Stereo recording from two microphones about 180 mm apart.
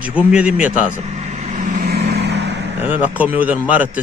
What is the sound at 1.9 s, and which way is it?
Vehicle, 65° right (ahead or behind).